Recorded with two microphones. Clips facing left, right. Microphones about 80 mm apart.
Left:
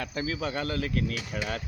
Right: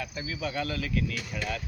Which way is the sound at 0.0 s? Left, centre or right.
Left.